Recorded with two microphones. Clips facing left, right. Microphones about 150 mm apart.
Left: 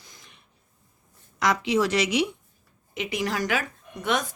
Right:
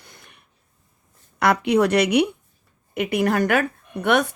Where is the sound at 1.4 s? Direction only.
60° right (ahead or behind).